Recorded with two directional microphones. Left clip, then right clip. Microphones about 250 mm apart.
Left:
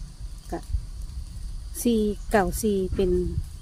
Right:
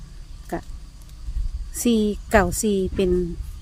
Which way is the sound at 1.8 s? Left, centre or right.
Centre.